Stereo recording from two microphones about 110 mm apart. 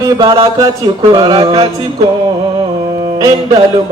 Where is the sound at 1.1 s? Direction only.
40° right (ahead or behind).